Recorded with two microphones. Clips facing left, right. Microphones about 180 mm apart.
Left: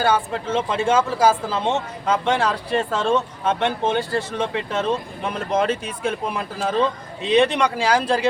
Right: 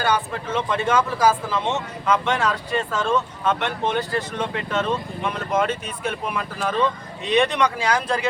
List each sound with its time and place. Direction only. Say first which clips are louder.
0.0 s speech: left 3 dB; 30° left (ahead or behind)